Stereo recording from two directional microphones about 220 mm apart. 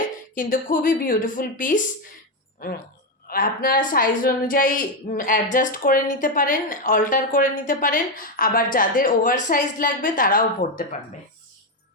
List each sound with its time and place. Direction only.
0.3 s a woman's voice: 40° left (ahead or behind)